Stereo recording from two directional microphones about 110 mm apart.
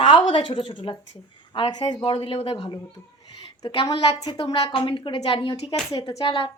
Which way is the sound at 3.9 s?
65° left (ahead or behind).